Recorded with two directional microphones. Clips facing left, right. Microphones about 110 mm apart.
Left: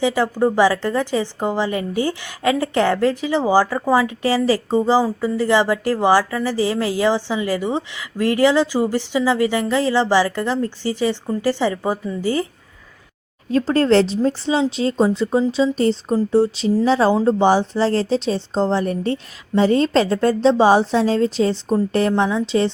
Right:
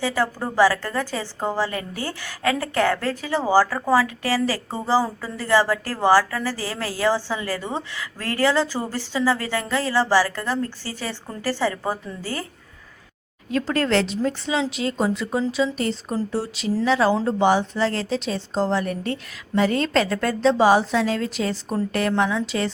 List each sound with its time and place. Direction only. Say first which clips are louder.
0.0 s a woman's voice: left 6 dB; 20° left (ahead or behind)
13.5 s a woman's voice: left 6 dB; 30° left (ahead or behind)